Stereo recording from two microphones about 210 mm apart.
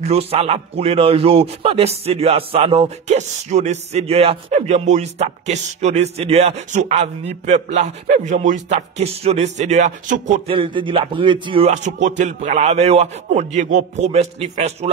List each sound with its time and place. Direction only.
0.0 s a man's voice: 30° right (ahead or behind)
10.5 s a man's voice: 25° right (ahead or behind)